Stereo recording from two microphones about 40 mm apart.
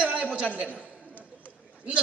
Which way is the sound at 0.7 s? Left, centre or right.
Right.